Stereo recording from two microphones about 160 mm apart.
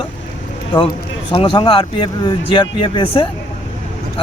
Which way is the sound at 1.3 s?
35° left (ahead or behind).